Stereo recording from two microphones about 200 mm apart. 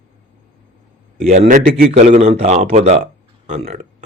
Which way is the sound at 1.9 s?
30° right (ahead or behind).